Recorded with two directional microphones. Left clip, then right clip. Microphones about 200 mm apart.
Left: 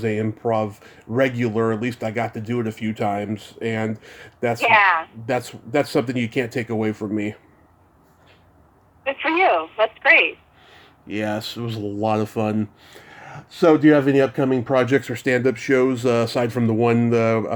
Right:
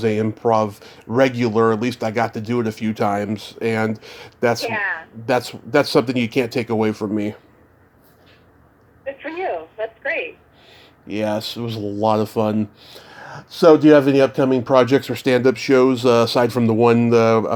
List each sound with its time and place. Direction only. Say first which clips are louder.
0.0 s speech: right 4 dB; centre (ahead or behind)
9.3 s telephone: left 9 dB; 25° left (ahead or behind)
10.7 s speech: right 2 dB; 5° left (ahead or behind)